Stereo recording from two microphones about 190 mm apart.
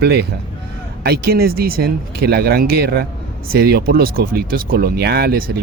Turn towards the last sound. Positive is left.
turn(degrees=-55)  # may be behind; listen again after turning